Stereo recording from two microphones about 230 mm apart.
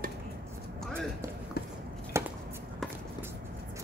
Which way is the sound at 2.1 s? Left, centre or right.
Centre.